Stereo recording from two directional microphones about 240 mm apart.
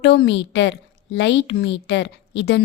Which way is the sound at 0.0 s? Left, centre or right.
Left.